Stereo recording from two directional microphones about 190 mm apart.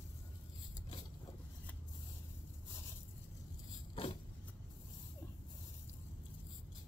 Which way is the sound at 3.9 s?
30° left (ahead or behind).